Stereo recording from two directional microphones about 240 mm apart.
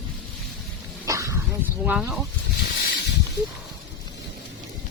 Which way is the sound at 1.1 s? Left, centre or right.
Centre.